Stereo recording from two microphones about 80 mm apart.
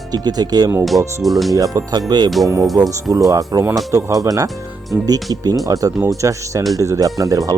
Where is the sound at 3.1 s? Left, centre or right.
Right.